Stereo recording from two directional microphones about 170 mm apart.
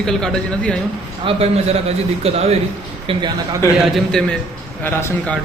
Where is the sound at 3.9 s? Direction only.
Centre (ahead or behind).